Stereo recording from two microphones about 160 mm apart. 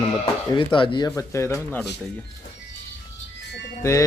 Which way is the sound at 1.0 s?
15° left (ahead or behind).